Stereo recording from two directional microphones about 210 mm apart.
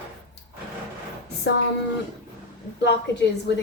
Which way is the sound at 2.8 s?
55° left (ahead or behind).